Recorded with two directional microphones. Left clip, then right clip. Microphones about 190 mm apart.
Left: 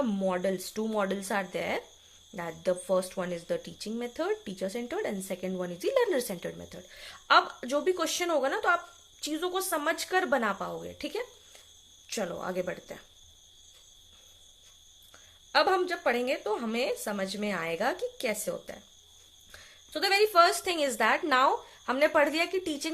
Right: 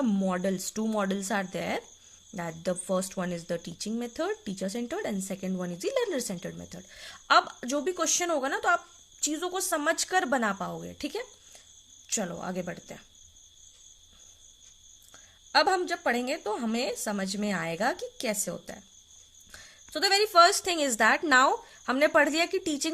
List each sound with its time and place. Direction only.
0.0 s speech: 35° right (ahead or behind)
15.5 s speech: 35° right (ahead or behind)